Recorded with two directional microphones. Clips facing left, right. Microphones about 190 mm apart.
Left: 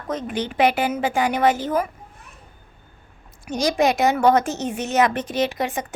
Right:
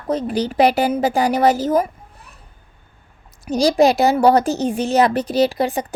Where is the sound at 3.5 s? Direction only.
35° right (ahead or behind).